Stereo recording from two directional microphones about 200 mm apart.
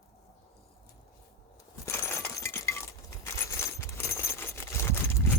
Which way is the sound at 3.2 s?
15° left (ahead or behind).